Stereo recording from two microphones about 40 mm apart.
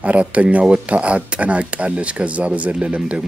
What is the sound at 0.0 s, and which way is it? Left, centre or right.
Speech, right.